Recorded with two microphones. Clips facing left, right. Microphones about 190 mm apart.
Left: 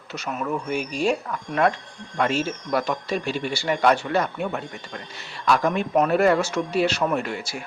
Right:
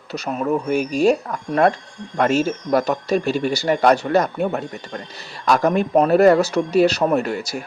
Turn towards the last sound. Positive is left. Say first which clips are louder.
# right 6 dB
turn(degrees=-40)  # may be behind; listen again after turning